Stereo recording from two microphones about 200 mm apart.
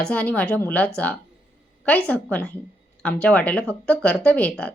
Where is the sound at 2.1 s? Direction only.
5° left (ahead or behind).